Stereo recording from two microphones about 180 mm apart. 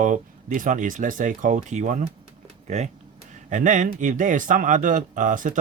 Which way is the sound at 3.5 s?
45° right (ahead or behind).